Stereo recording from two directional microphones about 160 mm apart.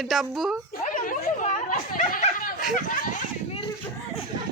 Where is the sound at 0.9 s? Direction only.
55° left (ahead or behind).